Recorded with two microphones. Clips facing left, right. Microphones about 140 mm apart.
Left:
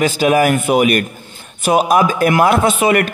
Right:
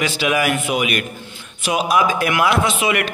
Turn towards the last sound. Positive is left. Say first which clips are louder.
# left 6 dB
turn(degrees=45)  # may be behind; listen again after turning